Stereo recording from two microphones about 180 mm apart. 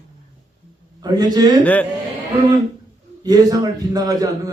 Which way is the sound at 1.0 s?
20° right (ahead or behind).